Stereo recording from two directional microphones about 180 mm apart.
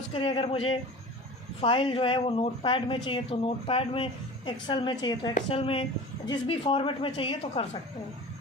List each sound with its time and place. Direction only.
0.1 s speech: 30° left (ahead or behind)
5.3 s speech: 35° left (ahead or behind)